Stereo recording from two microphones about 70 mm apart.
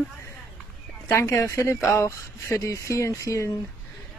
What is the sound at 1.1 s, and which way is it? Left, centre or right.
Speech, left.